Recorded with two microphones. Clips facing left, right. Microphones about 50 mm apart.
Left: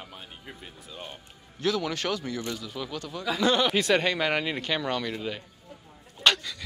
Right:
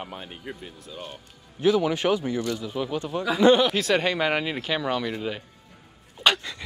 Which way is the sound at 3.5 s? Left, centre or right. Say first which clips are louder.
Right 1 dB; centre.